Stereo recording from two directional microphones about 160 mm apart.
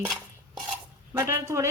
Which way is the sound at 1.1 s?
15° right (ahead or behind).